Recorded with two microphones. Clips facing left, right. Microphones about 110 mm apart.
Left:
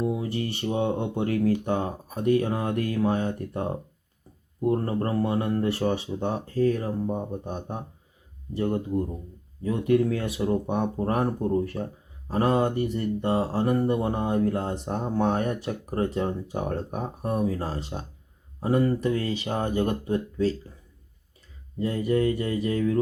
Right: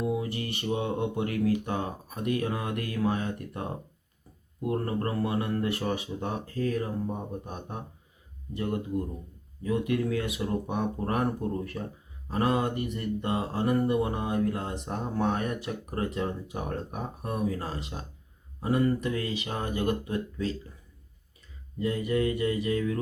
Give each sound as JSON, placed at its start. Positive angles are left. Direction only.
{"t": 0.0, "sound": "speech", "side_deg": 30}
{"t": 21.8, "sound": "speech", "side_deg": 30}